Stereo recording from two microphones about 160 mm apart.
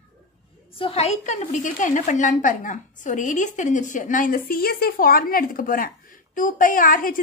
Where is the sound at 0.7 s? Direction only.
35° left (ahead or behind).